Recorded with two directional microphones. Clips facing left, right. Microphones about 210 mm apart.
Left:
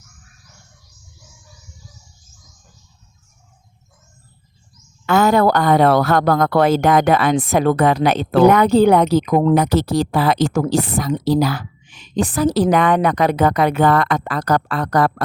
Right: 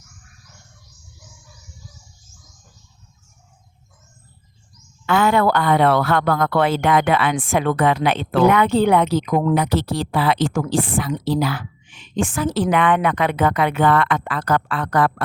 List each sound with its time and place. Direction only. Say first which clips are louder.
5.0 s a woman's voice: left 3 dB; 40° left (ahead or behind)